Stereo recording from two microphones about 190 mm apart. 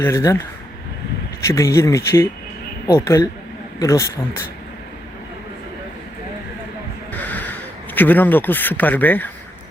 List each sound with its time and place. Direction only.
0.0 s speech: 15° left (ahead or behind)
1.5 s speech: 15° left (ahead or behind)
7.1 s a sound: 10° left (ahead or behind)
7.9 s speech: 10° left (ahead or behind)